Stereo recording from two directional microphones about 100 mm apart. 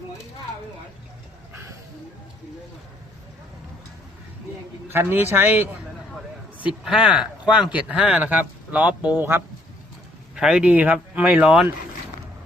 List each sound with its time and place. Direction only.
4.9 s a man's voice: 20° right (ahead or behind)
6.8 s speech: 10° right (ahead or behind)
10.3 s speech: 5° right (ahead or behind)